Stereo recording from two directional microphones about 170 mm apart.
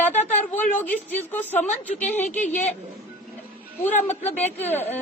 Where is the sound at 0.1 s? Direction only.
45° left (ahead or behind).